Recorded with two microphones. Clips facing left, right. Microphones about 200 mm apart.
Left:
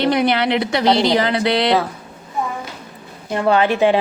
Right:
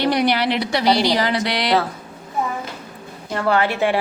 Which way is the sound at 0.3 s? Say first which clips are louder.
Left 2 dB; 55° left (ahead or behind).